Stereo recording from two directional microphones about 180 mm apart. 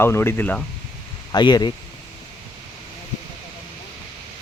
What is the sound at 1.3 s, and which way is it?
Speech, 25° left (ahead or behind).